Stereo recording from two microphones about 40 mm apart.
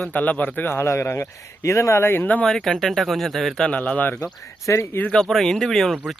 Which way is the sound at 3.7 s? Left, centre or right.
Left.